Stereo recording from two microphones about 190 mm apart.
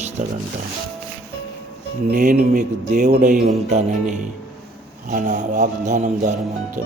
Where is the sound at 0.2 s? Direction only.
45° right (ahead or behind).